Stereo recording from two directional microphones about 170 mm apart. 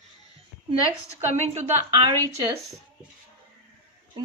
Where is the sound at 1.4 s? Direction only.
40° right (ahead or behind).